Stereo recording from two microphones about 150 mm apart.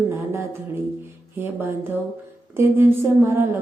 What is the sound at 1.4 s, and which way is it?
Speech, 15° right (ahead or behind).